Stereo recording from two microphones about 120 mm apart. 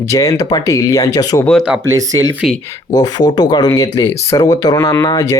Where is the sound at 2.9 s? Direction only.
35° left (ahead or behind).